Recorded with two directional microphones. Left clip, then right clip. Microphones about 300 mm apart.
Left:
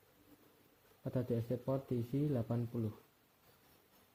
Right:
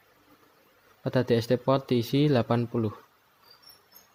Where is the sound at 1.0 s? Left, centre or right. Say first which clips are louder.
Right 14 dB; right.